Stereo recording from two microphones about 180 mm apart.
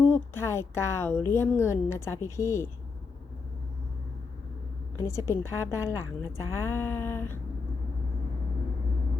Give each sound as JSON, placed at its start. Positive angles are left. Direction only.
{"t": 0.0, "sound": "a woman's voice", "side_deg": 15}
{"t": 4.9, "sound": "a woman's voice", "side_deg": 15}